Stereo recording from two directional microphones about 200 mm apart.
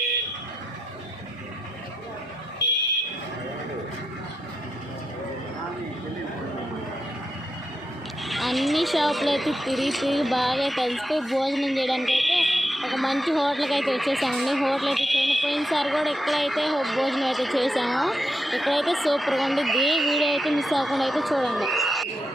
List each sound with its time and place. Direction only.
2.6 s fire alarm: 60° left (ahead or behind)
8.2 s speech: centre (ahead or behind)